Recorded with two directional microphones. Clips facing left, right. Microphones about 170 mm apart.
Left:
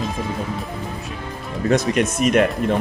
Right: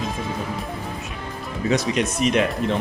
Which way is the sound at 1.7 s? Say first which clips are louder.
Left 3 dB; 50° left (ahead or behind).